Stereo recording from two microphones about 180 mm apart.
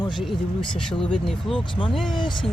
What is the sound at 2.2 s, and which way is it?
Speech, 25° left (ahead or behind).